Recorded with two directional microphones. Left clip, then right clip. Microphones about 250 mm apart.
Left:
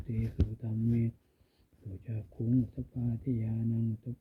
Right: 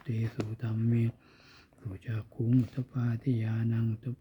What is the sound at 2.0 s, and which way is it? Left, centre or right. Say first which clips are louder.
Speech: right 3 dB; centre.